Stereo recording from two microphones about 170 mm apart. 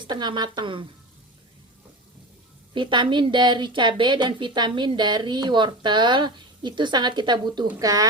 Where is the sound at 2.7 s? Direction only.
25° right (ahead or behind).